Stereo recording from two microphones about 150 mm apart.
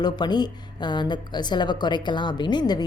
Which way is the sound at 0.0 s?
30° left (ahead or behind).